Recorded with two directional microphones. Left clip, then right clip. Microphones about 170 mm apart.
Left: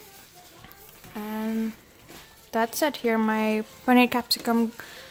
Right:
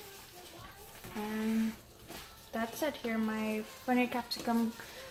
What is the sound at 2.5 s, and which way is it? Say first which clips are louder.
Speech: left 11 dB; 70° left (ahead or behind).